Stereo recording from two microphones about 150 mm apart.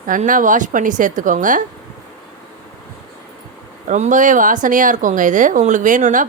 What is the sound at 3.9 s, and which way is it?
Speech, 55° right (ahead or behind).